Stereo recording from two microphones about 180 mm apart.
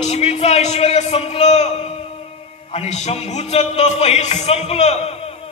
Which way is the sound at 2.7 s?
35° left (ahead or behind).